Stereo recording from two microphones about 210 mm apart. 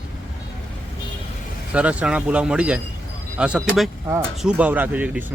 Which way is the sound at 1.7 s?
5° right (ahead or behind).